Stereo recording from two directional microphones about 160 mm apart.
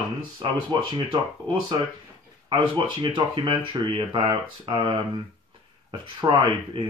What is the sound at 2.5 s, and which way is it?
Speech, 30° right (ahead or behind).